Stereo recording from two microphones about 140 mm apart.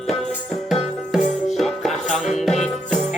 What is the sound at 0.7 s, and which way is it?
Music, 45° left (ahead or behind).